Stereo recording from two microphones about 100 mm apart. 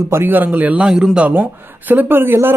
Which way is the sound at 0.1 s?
20° right (ahead or behind).